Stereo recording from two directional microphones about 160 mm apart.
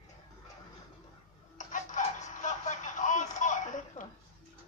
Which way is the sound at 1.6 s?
50° left (ahead or behind).